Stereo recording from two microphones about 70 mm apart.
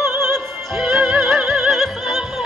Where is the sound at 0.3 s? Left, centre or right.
Centre.